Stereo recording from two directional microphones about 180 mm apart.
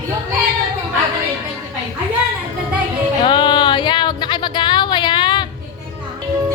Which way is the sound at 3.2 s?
25° left (ahead or behind).